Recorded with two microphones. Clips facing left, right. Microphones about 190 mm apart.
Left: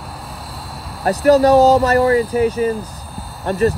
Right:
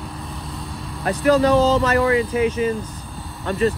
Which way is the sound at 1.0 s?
40° left (ahead or behind).